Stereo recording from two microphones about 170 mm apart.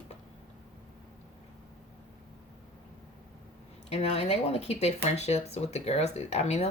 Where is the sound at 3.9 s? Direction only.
40° left (ahead or behind).